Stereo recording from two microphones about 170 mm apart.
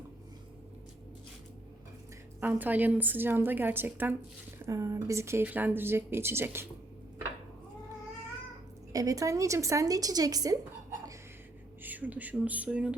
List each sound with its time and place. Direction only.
2.4 s speech: 10° right (ahead or behind)
8.9 s a woman's voice: 20° right (ahead or behind)
11.8 s speech: 10° right (ahead or behind)